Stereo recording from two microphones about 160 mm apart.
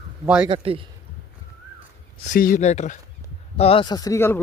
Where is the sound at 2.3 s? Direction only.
60° left (ahead or behind).